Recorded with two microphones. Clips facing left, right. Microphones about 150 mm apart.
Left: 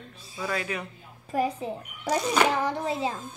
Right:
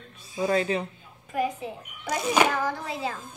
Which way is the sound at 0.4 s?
30° right (ahead or behind).